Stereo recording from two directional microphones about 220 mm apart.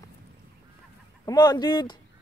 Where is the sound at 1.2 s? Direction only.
20° left (ahead or behind).